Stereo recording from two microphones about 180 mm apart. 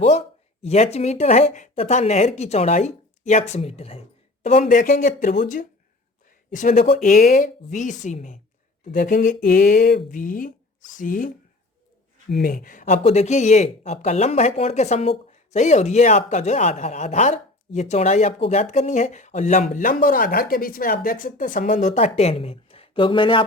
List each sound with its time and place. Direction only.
0.0 s speech: 35° left (ahead or behind)
6.5 s speech: 45° left (ahead or behind); by 23.5 s 30° left (ahead or behind)